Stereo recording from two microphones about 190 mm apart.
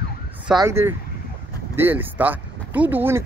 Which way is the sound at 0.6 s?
15° right (ahead or behind).